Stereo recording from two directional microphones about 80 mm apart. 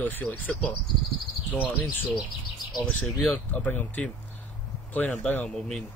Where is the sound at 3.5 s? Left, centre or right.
Left.